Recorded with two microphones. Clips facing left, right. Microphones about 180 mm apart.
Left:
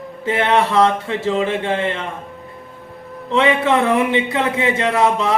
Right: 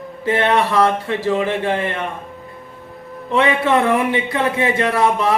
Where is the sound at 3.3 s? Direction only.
20° left (ahead or behind).